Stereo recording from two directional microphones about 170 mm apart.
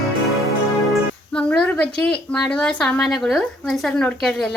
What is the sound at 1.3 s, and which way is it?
A woman's voice, 5° left (ahead or behind).